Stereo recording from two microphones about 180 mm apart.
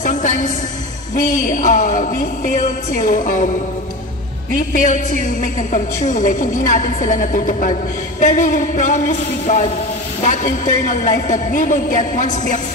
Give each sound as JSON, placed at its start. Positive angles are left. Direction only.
{"t": 0.0, "sound": "a sound", "side_deg": 45}
{"t": 1.1, "sound": "a woman's voice", "side_deg": 50}
{"t": 4.7, "sound": "a woman's voice", "side_deg": 50}